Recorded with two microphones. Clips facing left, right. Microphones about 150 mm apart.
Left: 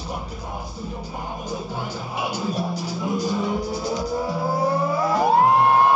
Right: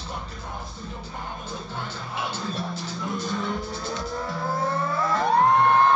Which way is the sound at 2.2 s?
5° left (ahead or behind).